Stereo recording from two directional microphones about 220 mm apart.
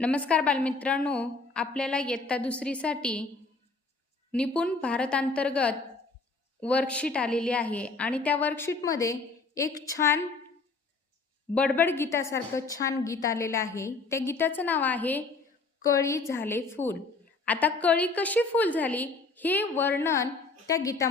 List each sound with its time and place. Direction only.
0.0 s a woman's voice: 5° left (ahead or behind)
4.3 s a woman's voice: 5° left (ahead or behind)
11.5 s a woman's voice: 5° left (ahead or behind)